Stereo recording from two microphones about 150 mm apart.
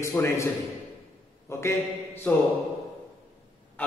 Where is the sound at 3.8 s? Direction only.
10° left (ahead or behind).